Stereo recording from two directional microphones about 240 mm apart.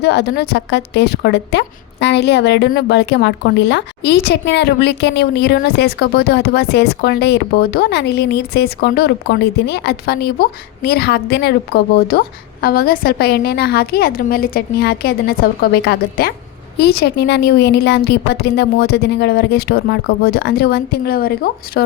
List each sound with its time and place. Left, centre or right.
0.0 s a woman's voice: left